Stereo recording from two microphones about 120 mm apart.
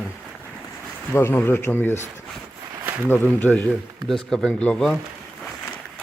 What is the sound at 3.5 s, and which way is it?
Speech, 5° left (ahead or behind).